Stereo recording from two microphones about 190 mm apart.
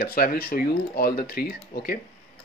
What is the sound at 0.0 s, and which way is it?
Speech, 50° left (ahead or behind).